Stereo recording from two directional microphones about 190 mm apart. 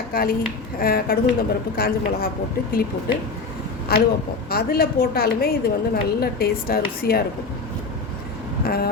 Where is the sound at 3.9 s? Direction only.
55° left (ahead or behind).